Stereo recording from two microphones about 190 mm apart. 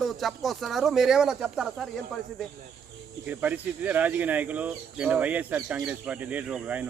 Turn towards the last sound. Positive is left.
turn(degrees=-10)  # may be behind; listen again after turning